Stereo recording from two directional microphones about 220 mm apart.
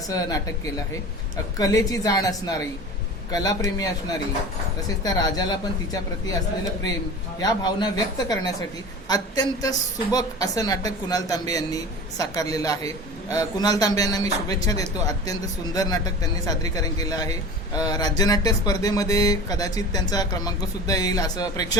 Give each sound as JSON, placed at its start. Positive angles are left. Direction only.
{"t": 0.1, "sound": "a woman's voice", "side_deg": 15}
{"t": 5.0, "sound": "a woman's voice", "side_deg": 15}
{"t": 7.3, "sound": "a woman's voice", "side_deg": 20}